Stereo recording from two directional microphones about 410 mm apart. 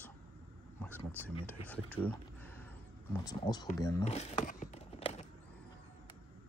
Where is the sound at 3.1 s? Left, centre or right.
Centre.